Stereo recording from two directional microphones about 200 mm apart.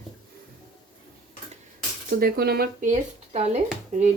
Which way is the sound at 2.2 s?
50° right (ahead or behind).